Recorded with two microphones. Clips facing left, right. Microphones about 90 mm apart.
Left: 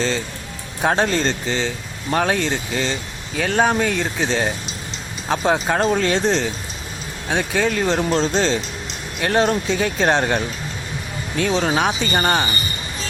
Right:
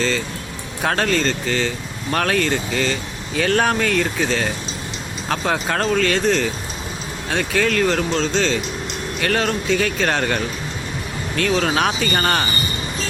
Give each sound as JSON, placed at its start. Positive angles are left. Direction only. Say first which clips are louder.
{"t": 0.8, "sound": "speech", "louder": "left 1 dB", "side_deg": 20}
{"t": 1.2, "sound": "speech", "louder": "even", "side_deg": 30}
{"t": 1.5, "sound": "speech", "louder": "right 1 dB", "side_deg": 15}
{"t": 3.3, "sound": "speech", "louder": "even", "side_deg": 10}
{"t": 7.3, "sound": "speech", "louder": "even", "side_deg": 15}
{"t": 8.1, "sound": "speech", "louder": "left 1 dB", "side_deg": 30}
{"t": 9.2, "sound": "speech", "louder": "left 3 dB", "side_deg": 20}